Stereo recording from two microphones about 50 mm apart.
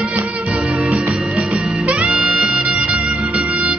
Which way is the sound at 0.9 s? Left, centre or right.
Right.